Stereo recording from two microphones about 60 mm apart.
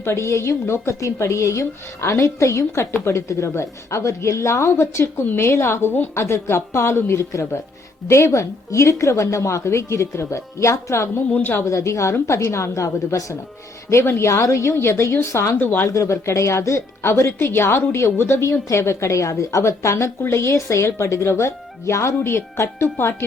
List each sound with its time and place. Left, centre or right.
0.0 s a woman's voice: left
13.9 s speech: left
15.5 s speech: left
15.9 s a woman's voice: left